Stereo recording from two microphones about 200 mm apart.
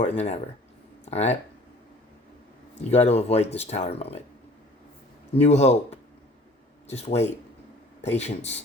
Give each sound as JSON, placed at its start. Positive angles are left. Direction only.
{"t": 0.0, "sound": "speech", "side_deg": 35}
{"t": 2.9, "sound": "speech", "side_deg": 30}
{"t": 5.4, "sound": "speech", "side_deg": 30}